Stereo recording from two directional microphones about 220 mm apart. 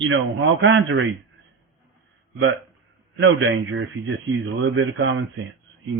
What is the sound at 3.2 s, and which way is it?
A man's voice, 60° right (ahead or behind).